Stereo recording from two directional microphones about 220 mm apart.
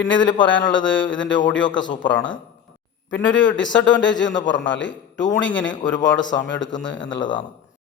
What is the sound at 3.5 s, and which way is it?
A man's voice, 55° left (ahead or behind).